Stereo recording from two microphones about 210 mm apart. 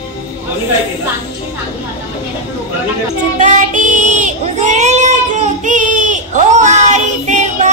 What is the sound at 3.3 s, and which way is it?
Child singing, 35° right (ahead or behind).